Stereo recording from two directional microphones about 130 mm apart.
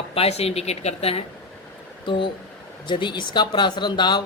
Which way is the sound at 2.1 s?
40° left (ahead or behind).